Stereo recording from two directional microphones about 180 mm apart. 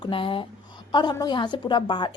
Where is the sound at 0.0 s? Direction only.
30° left (ahead or behind).